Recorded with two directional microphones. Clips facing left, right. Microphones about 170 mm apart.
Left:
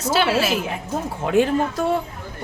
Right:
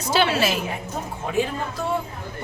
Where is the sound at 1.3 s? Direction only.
80° left.